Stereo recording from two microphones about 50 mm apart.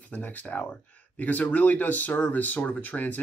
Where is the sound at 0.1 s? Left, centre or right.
Left.